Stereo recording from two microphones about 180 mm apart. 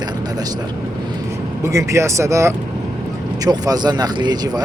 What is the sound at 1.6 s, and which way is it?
A man's voice, 15° right (ahead or behind).